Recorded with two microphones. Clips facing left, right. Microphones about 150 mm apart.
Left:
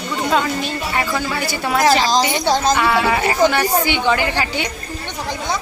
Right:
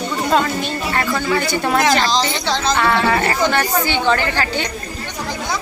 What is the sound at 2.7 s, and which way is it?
A woman's voice, 10° left (ahead or behind).